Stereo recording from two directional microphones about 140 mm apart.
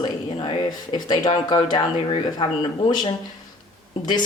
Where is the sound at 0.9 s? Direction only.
30° left (ahead or behind).